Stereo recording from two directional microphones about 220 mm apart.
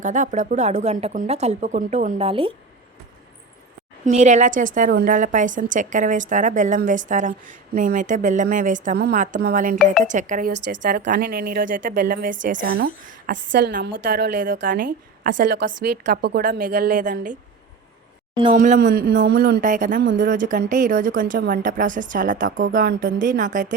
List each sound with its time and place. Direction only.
0.0 s a woman's voice: 35° right (ahead or behind)
4.0 s a woman's voice: 35° right (ahead or behind)
10.7 s a woman's voice: 45° right (ahead or behind)
13.7 s a woman's voice: 50° right (ahead or behind)
18.5 s a woman's voice: 35° right (ahead or behind)